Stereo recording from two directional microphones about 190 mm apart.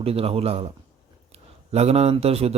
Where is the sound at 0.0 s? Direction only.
30° right (ahead or behind).